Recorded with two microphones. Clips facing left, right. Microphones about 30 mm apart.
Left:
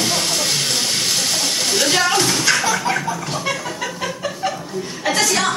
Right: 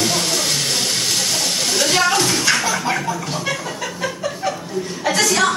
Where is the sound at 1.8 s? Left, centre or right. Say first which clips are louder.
Even; centre.